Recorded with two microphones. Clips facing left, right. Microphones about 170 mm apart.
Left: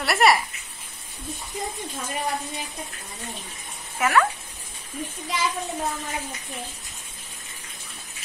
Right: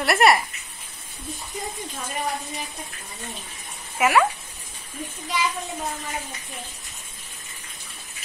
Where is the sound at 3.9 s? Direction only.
10° right (ahead or behind).